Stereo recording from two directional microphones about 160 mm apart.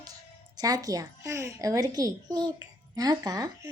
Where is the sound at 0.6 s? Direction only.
20° right (ahead or behind).